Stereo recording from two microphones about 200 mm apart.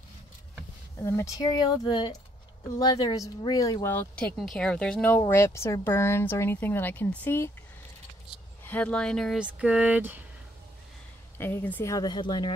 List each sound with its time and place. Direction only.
0.9 s speech: 15° left (ahead or behind)
8.6 s speech: 5° left (ahead or behind)
11.3 s speech: 10° left (ahead or behind)